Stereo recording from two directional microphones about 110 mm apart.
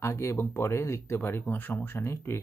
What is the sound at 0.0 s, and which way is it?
Speech, 25° left (ahead or behind).